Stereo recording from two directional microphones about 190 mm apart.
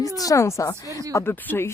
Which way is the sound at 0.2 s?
15° left (ahead or behind).